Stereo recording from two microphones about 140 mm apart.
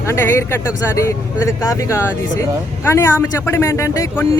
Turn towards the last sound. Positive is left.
turn(degrees=25)  # may be behind; listen again after turning